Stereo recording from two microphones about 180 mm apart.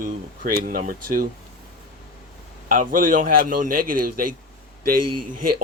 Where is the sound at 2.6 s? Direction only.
45° right (ahead or behind).